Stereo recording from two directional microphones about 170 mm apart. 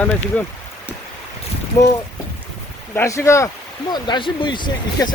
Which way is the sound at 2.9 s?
15° left (ahead or behind).